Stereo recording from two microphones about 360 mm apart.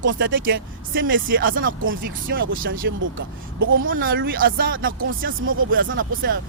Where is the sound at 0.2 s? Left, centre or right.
Right.